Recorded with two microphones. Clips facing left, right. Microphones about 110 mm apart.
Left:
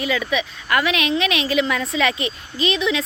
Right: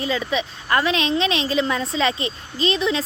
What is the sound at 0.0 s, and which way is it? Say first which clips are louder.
A woman's voice: left 1 dB; 30° right (ahead or behind).